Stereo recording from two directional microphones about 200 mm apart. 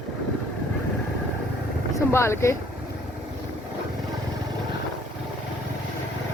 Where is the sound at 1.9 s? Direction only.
15° left (ahead or behind).